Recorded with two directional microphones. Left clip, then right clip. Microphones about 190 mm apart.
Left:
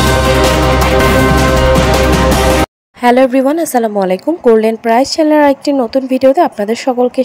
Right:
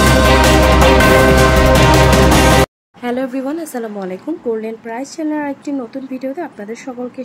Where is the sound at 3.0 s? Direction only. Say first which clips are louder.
Left 12 dB; 35° left (ahead or behind).